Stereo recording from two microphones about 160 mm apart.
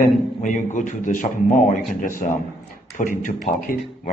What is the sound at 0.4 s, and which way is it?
A man's voice, 50° left (ahead or behind).